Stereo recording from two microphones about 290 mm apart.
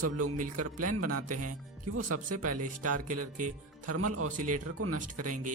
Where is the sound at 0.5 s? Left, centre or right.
Right.